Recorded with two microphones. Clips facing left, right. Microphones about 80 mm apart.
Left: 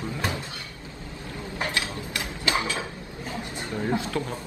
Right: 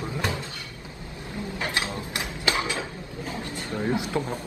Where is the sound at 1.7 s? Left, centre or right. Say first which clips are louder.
Right 1 dB; right.